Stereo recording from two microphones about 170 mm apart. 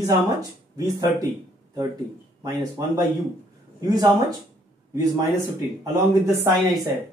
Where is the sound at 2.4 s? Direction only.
20° right (ahead or behind).